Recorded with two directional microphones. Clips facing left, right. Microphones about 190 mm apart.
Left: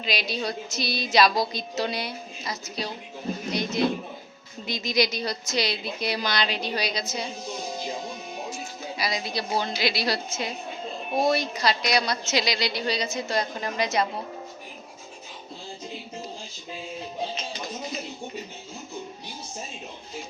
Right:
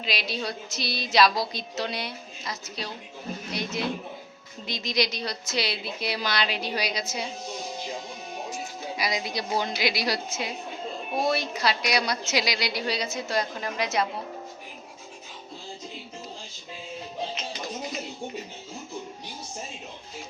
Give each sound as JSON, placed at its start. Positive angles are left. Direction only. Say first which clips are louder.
{"t": 0.0, "sound": "a woman's voice", "louder": "left 2 dB", "side_deg": 0}
{"t": 8.4, "sound": "a woman's voice", "louder": "even", "side_deg": -15}